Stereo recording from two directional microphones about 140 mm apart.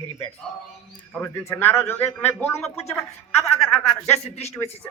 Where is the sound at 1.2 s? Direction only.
15° left (ahead or behind).